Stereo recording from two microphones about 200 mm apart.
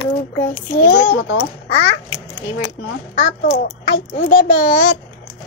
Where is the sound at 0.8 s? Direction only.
70° left (ahead or behind).